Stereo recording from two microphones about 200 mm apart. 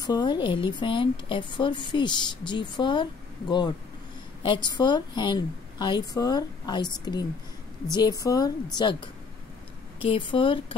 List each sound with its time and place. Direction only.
0.0 s speech: 20° left (ahead or behind)